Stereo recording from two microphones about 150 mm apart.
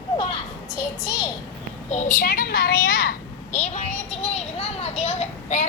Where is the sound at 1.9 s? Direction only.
55° left (ahead or behind); by 3.1 s 75° left (ahead or behind).